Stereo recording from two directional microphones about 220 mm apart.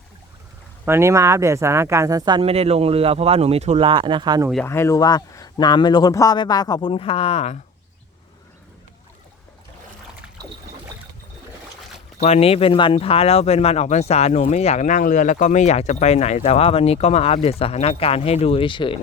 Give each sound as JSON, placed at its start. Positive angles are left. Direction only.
{"t": 0.9, "sound": "speech", "side_deg": -10}
{"t": 4.6, "sound": "speech", "side_deg": 10}
{"t": 12.2, "sound": "speech", "side_deg": 30}